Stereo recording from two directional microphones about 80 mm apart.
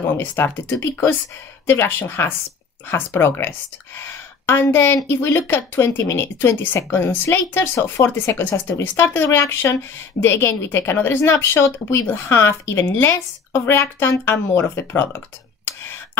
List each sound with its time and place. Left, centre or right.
0.0 s a woman's voice: left